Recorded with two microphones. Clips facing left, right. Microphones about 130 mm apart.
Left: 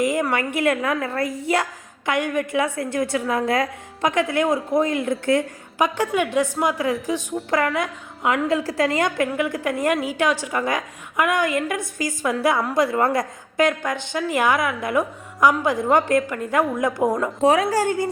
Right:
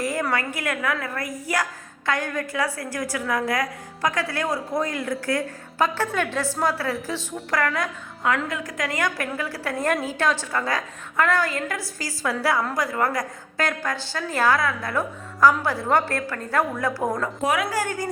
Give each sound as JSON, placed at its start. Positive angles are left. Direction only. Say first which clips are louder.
{"t": 0.0, "sound": "a woman's voice", "louder": "left 4 dB", "side_deg": 15}
{"t": 17.4, "sound": "a woman's voice", "louder": "left 7 dB", "side_deg": 35}